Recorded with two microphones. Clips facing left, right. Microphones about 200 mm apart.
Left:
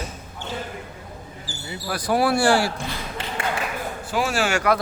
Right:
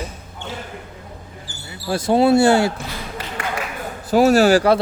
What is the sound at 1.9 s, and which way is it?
Speech, 25° right (ahead or behind).